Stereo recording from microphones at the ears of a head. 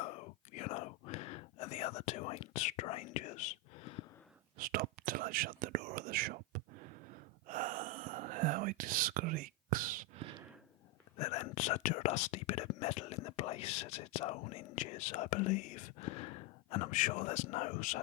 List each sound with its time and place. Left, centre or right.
0.0 s whispering: left
4.5 s whispering: right
11.2 s speech: left